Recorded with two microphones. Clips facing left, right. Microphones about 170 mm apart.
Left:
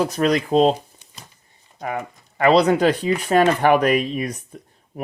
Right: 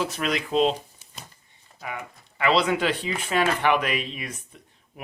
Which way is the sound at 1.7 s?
45° left (ahead or behind).